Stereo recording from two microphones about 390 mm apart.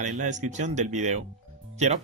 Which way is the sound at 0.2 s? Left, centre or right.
Centre.